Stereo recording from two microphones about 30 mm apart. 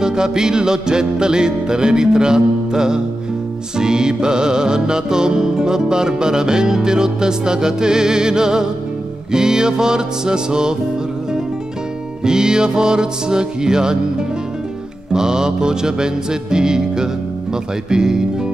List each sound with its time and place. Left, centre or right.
0.0 s music: right
12.2 s music: right
15.1 s music: right